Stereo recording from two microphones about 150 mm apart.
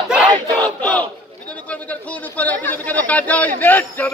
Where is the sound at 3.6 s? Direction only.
10° left (ahead or behind).